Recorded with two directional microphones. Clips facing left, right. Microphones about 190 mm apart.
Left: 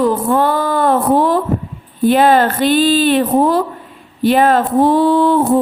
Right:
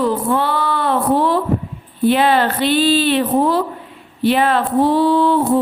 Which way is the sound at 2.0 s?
45° left (ahead or behind).